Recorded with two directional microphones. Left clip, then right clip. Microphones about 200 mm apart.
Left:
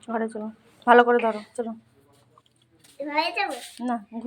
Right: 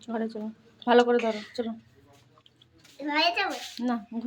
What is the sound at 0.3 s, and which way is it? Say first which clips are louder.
Speech: left 3 dB; centre (ahead or behind).